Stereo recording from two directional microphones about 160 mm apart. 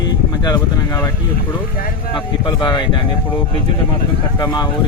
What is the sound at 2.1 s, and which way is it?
Speech, 30° left (ahead or behind).